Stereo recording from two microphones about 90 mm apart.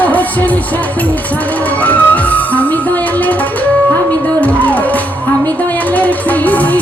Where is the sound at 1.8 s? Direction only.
15° left (ahead or behind).